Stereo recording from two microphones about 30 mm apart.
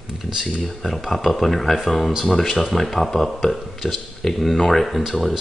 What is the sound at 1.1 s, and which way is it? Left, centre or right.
Speech, centre.